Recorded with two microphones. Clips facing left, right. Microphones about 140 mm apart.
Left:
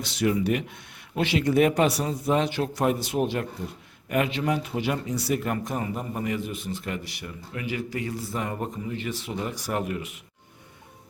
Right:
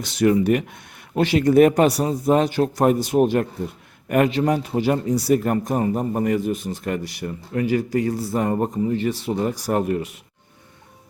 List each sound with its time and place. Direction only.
0.0 s speech: 50° right (ahead or behind)